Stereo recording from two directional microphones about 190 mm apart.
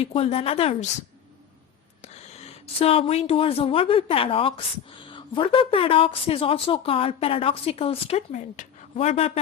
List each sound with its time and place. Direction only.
0.0 s a woman's voice: 30° left (ahead or behind)
2.1 s speech: 35° left (ahead or behind)